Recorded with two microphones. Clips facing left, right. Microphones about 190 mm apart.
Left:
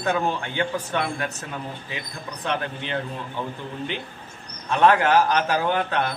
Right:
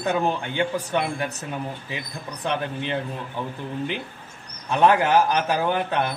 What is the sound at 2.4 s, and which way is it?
Speech, 15° right (ahead or behind).